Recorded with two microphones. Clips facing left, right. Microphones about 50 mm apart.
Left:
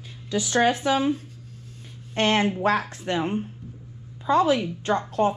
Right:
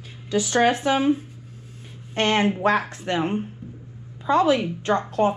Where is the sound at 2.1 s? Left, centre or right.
Right.